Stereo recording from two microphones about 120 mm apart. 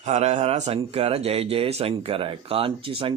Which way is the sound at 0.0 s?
70° right (ahead or behind).